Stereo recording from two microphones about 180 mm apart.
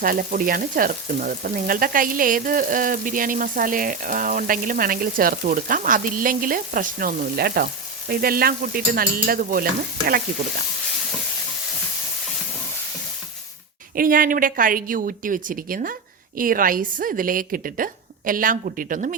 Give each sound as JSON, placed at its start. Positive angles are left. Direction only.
{"t": 0.0, "sound": "frying", "side_deg": -50}
{"t": 13.9, "sound": "frying", "side_deg": -50}